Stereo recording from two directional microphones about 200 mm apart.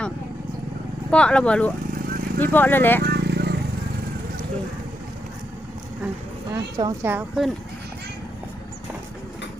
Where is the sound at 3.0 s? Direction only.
55° right (ahead or behind).